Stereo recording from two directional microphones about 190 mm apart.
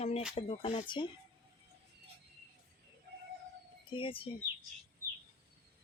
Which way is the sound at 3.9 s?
25° left (ahead or behind).